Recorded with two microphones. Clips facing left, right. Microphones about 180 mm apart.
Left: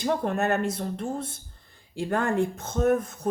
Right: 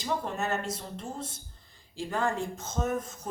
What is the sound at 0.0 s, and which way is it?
Speech, 60° left (ahead or behind).